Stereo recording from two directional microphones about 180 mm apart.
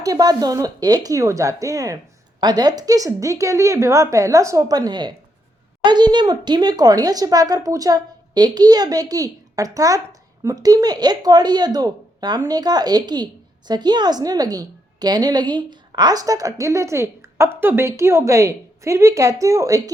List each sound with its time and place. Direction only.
0.0 s speech: 20° right (ahead or behind)